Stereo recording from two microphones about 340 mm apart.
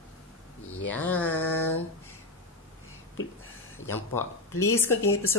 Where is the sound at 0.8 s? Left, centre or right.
Centre.